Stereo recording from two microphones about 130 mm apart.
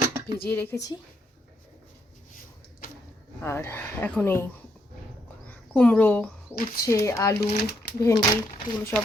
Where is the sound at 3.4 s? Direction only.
20° left (ahead or behind).